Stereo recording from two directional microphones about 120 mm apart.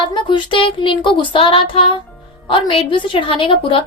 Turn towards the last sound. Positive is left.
turn(degrees=45)  # may be behind; listen again after turning